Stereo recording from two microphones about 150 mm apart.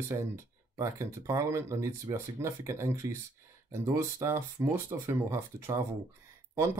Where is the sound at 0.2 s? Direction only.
20° right (ahead or behind).